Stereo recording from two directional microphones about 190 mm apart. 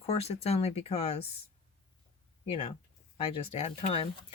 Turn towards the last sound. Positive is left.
turn(degrees=30)  # may be behind; listen again after turning